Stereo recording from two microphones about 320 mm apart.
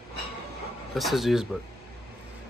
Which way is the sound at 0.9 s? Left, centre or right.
Centre.